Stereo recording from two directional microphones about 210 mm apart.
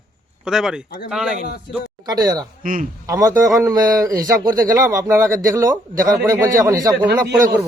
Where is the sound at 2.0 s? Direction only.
20° right (ahead or behind).